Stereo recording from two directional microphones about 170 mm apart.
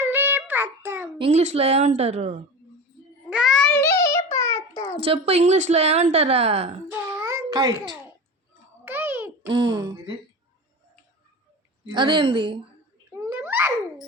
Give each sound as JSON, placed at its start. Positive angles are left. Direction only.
{"t": 0.0, "sound": "child singing", "side_deg": -10}
{"t": 1.2, "sound": "a woman's voice", "side_deg": -40}
{"t": 3.2, "sound": "a sound", "side_deg": -5}
{"t": 3.7, "sound": "child singing", "side_deg": 15}
{"t": 4.9, "sound": "a woman's voice", "side_deg": -35}
{"t": 7.2, "sound": "babbling", "side_deg": -15}
{"t": 8.8, "sound": "a sound", "side_deg": -10}
{"t": 9.5, "sound": "a woman's voice", "side_deg": -25}
{"t": 11.9, "sound": "a woman's voice", "side_deg": -30}
{"t": 13.1, "sound": "babbling", "side_deg": -15}